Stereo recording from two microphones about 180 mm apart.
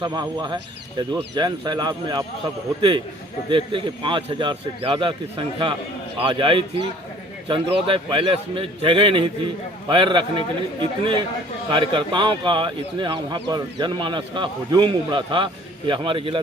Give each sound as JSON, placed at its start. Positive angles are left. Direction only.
{"t": 0.0, "sound": "a man's voice", "side_deg": -25}
{"t": 3.5, "sound": "a man's voice", "side_deg": -25}